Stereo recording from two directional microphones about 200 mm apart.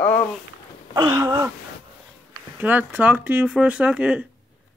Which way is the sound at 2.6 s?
10° right (ahead or behind).